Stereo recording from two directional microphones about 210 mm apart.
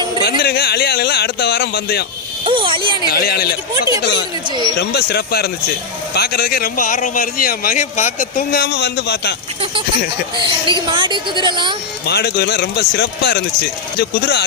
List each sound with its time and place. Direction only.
0.3 s a man's voice: 50° left (ahead or behind)
2.4 s a woman's voice: 25° right (ahead or behind)
3.1 s a man's voice: 50° left (ahead or behind)
4.4 s a woman's voice: 20° right (ahead or behind)
4.8 s a man's voice: 50° left (ahead or behind)
10.3 s a woman's voice: 25° right (ahead or behind)
12.0 s a man's voice: 50° left (ahead or behind)